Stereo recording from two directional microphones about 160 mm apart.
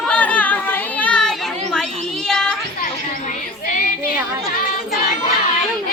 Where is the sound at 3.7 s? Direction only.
60° left (ahead or behind).